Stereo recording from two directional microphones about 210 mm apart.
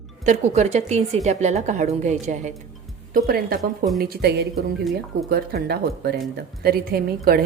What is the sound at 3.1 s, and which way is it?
A woman's voice, 45° right (ahead or behind).